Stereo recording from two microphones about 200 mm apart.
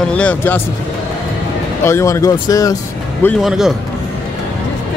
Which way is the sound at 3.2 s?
Centre (ahead or behind).